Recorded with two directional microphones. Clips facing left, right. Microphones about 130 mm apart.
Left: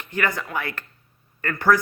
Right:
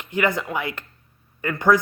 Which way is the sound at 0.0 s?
20° right (ahead or behind).